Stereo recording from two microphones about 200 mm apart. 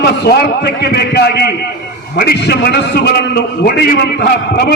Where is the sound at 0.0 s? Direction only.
55° left (ahead or behind).